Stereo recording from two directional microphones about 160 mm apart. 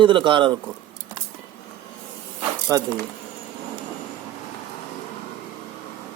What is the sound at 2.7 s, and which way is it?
Speech, 20° right (ahead or behind).